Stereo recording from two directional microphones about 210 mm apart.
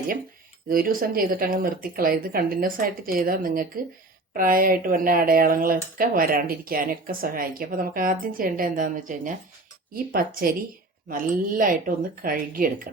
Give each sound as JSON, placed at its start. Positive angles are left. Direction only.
{"t": 0.7, "sound": "speech", "side_deg": -45}